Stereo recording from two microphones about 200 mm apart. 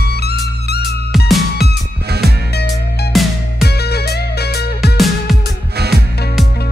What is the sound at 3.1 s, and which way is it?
Music, centre (ahead or behind).